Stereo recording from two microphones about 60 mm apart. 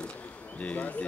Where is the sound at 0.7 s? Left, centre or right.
Left.